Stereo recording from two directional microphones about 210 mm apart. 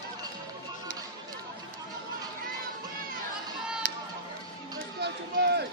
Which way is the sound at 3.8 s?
45° right (ahead or behind).